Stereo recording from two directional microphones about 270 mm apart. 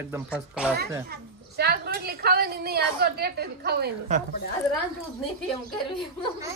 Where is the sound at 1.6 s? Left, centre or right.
Right.